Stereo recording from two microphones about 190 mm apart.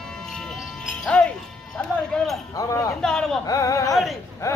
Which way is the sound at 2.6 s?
15° left (ahead or behind).